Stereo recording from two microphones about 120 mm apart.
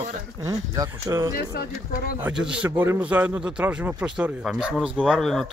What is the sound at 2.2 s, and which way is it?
A man's voice, 5° right (ahead or behind).